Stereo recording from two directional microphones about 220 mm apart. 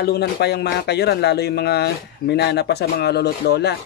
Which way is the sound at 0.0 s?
45° left (ahead or behind).